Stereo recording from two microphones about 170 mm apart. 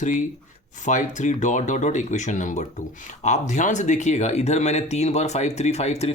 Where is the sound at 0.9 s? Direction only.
45° left (ahead or behind).